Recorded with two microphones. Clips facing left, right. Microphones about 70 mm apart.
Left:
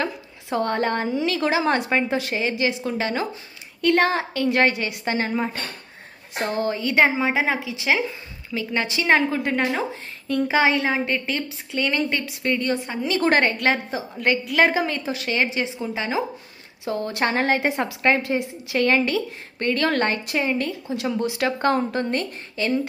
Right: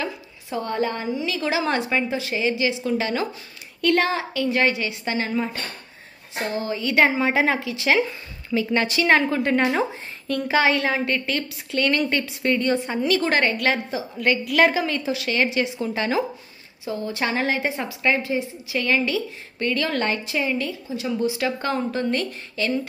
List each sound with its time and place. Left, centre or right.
0.5 s a woman's voice: left
0.7 s a woman's voice: left
1.4 s a woman's voice: left
6.3 s a woman's voice: left
6.8 s a woman's voice: left
7.2 s a woman's voice: centre
8.5 s a woman's voice: centre
12.2 s a woman's voice: centre
13.2 s a woman's voice: left
15.8 s a woman's voice: centre
16.8 s a woman's voice: left
22.6 s a woman's voice: left